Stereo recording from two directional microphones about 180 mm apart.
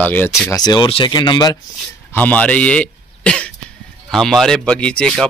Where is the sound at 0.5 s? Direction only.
25° left (ahead or behind).